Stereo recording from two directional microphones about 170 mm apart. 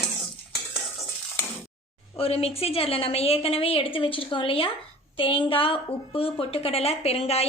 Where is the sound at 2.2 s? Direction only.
35° left (ahead or behind).